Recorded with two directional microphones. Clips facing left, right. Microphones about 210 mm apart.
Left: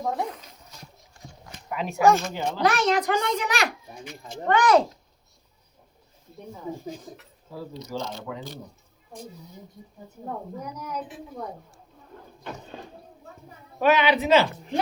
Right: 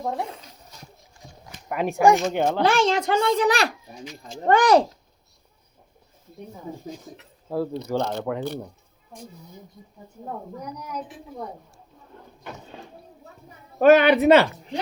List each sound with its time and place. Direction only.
1.7 s speech: 55° right (ahead or behind)
2.6 s a child's voice: 30° right (ahead or behind)
7.5 s speech: 60° right (ahead or behind)
13.7 s speech: 50° right (ahead or behind)